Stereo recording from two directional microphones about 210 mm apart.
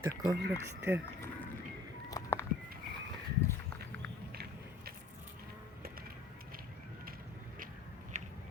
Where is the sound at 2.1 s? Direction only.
15° left (ahead or behind).